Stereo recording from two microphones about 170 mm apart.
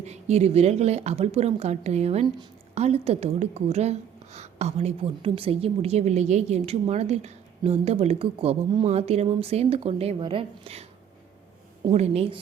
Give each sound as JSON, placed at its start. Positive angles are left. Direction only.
{"t": 0.0, "sound": "a woman's voice", "side_deg": -40}
{"t": 11.9, "sound": "a woman's voice", "side_deg": -40}